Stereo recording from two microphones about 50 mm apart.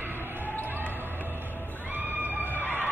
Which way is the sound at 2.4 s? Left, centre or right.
Left.